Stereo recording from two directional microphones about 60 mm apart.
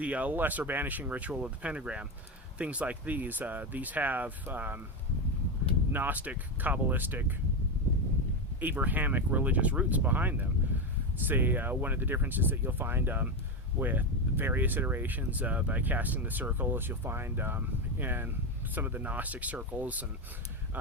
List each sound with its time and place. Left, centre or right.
0.0 s speech: right
5.9 s speech: right
8.6 s speech: right